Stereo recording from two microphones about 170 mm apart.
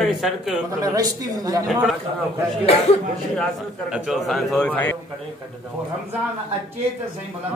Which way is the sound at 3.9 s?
Centre (ahead or behind).